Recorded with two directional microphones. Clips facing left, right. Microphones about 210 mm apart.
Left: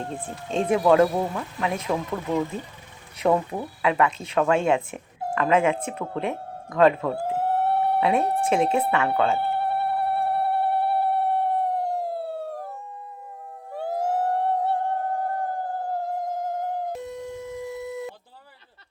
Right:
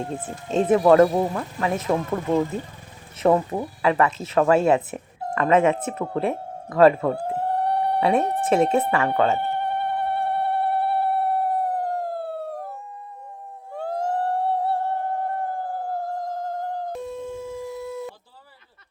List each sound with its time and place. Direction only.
0.0 s speech: 5° right (ahead or behind)
1.1 s speech: 20° right (ahead or behind)
1.4 s speech: 5° right (ahead or behind)
1.9 s speech: 30° right (ahead or behind)
3.5 s speech: 20° right (ahead or behind)
3.8 s speech: centre (ahead or behind)
5.2 s speech: 5° left (ahead or behind)
6.0 s speech: 5° right (ahead or behind)
7.1 s a sound: 5° left (ahead or behind)
13.7 s a sound: 5° left (ahead or behind)
17.0 s a sound: 15° left (ahead or behind)